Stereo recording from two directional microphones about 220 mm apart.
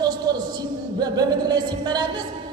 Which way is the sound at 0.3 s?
20° right (ahead or behind).